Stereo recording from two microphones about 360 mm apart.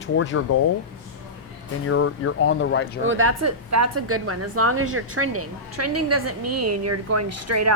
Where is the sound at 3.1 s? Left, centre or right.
Right.